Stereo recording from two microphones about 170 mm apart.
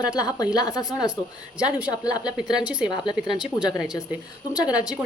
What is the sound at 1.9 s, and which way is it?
Speech, 20° left (ahead or behind).